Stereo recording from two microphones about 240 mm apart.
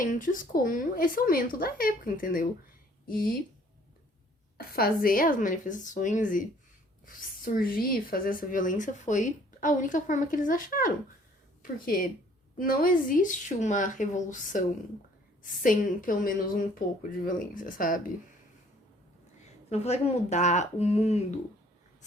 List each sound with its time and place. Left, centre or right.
0.0 s a woman's voice: left
4.5 s a woman's voice: left
12.5 s a woman's voice: left
15.6 s a woman's voice: left
19.7 s speech: left